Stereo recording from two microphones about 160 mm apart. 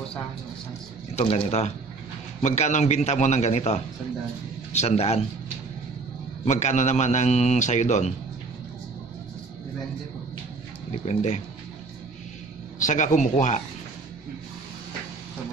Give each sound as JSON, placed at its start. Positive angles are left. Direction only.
{"t": 1.1, "sound": "a man's voice", "side_deg": 35}
{"t": 6.4, "sound": "a man's voice", "side_deg": 45}
{"t": 11.1, "sound": "a man's voice", "side_deg": 45}
{"t": 12.7, "sound": "a man's voice", "side_deg": 50}